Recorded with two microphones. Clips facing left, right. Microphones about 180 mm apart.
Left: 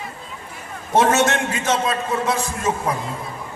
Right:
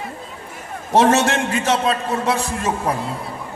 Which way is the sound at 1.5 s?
65° right (ahead or behind).